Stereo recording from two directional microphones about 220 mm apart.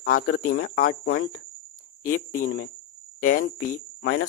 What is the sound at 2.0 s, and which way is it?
Speech, 40° left (ahead or behind).